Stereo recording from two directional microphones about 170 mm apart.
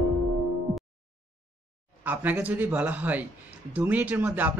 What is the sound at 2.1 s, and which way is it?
Speech, 10° right (ahead or behind).